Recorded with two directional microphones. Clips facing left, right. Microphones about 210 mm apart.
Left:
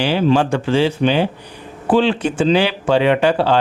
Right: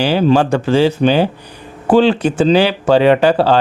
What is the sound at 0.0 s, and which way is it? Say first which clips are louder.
Speech: right 3 dB; 40° right (ahead or behind).